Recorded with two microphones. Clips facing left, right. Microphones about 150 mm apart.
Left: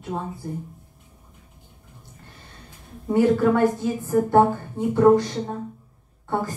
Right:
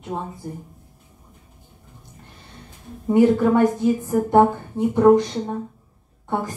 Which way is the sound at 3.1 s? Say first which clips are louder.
Right 2 dB; 20° right (ahead or behind).